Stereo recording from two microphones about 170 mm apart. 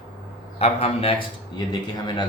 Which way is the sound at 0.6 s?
35° left (ahead or behind).